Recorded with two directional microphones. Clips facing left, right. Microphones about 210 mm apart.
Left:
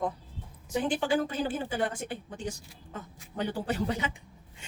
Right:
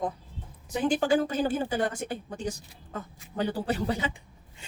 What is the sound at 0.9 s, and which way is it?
Speech, 45° right (ahead or behind).